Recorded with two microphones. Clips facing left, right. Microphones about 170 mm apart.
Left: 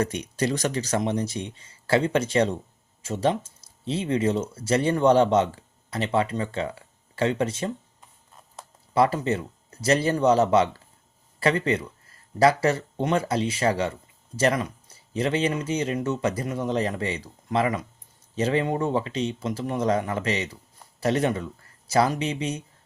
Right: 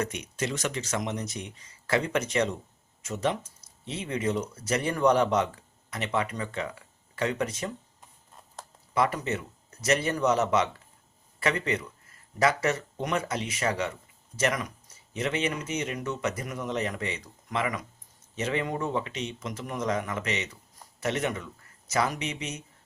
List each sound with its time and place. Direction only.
0.0 s speech: 35° left (ahead or behind)
8.9 s speech: 30° left (ahead or behind)